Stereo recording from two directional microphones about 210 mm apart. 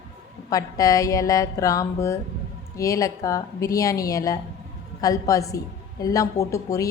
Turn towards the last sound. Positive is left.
turn(degrees=15)  # may be behind; listen again after turning